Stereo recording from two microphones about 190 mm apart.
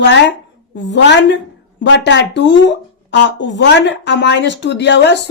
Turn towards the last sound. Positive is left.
turn(degrees=65)  # may be behind; listen again after turning